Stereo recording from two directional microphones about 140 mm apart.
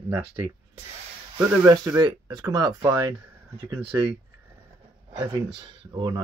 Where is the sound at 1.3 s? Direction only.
25° right (ahead or behind).